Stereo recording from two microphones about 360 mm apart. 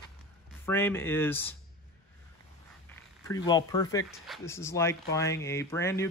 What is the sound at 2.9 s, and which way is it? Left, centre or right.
Speech, centre.